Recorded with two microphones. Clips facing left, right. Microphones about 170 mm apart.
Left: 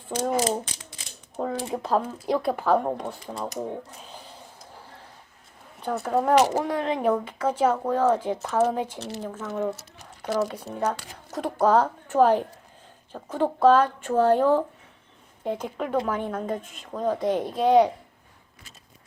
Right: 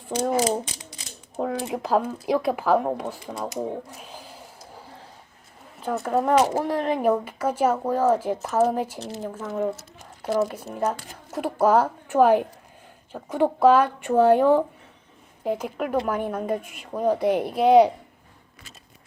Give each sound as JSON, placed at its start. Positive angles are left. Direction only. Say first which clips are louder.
{"t": 0.1, "sound": "speech", "louder": "right 2 dB", "side_deg": -10}
{"t": 1.4, "sound": "typewriter", "louder": "right 2 dB", "side_deg": -5}
{"t": 1.6, "sound": "speech", "louder": "right 2 dB", "side_deg": -10}
{"t": 5.8, "sound": "speech", "louder": "right 1 dB", "side_deg": 0}